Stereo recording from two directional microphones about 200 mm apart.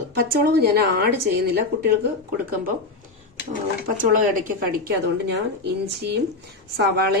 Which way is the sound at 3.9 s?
45° right (ahead or behind).